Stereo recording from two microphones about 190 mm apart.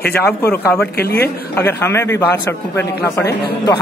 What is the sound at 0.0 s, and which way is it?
Speech, 10° left (ahead or behind).